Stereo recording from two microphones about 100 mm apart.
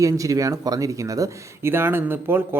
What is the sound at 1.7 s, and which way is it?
Speech, 25° right (ahead or behind).